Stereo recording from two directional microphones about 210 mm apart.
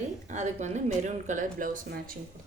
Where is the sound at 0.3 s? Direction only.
35° right (ahead or behind).